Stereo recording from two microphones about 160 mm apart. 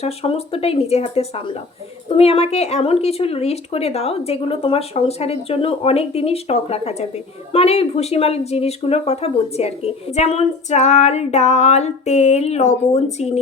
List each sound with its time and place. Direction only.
0.0 s speech: 40° left (ahead or behind)